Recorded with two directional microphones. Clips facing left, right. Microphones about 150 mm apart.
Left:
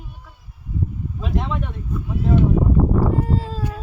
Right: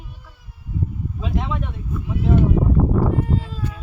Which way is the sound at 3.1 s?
35° left (ahead or behind).